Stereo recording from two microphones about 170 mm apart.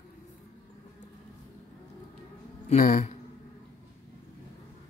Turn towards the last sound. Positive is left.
turn(degrees=50)  # may be behind; listen again after turning